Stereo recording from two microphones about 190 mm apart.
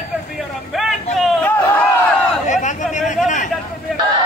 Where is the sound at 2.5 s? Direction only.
40° left (ahead or behind).